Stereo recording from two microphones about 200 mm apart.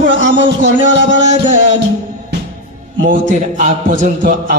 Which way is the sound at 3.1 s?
40° right (ahead or behind).